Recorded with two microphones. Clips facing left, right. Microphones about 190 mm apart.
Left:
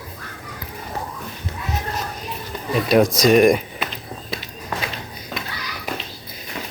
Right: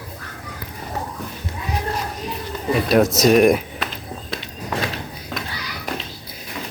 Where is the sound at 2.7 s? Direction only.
5° right (ahead or behind).